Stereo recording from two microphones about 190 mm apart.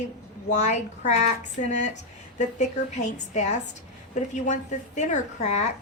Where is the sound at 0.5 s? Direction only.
40° left (ahead or behind).